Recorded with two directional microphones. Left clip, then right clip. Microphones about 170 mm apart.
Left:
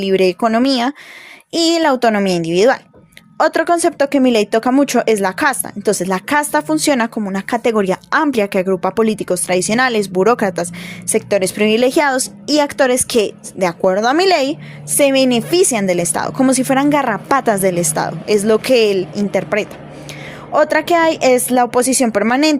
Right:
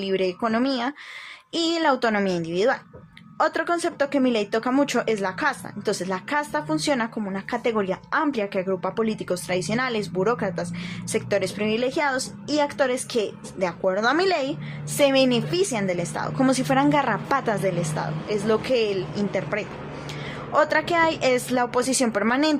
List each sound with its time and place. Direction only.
0.0 s speech: 55° left (ahead or behind)
11.1 s speech: 45° left (ahead or behind)
14.9 s speech: 40° left (ahead or behind)